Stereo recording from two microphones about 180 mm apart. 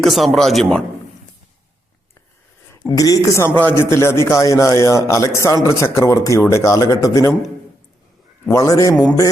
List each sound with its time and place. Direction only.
0.0 s speech: centre (ahead or behind)
2.9 s speech: 20° left (ahead or behind)
8.4 s a man's voice: 20° left (ahead or behind)